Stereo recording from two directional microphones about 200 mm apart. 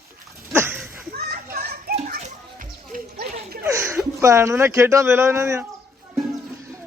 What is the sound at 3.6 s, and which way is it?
Speech, 10° right (ahead or behind).